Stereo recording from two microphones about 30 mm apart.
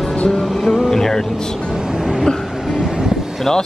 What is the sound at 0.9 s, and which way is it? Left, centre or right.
Speech, centre.